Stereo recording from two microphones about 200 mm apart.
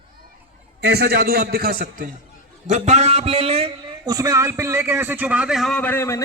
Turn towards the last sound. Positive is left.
turn(degrees=10)  # may be behind; listen again after turning